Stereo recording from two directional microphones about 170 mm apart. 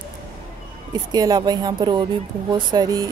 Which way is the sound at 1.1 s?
25° right (ahead or behind).